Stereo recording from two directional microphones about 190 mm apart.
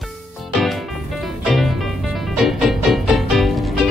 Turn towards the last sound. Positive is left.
turn(degrees=0)  # may be behind; listen again after turning